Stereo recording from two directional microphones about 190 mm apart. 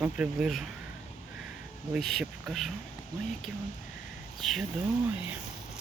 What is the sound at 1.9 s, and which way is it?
Speech, centre (ahead or behind).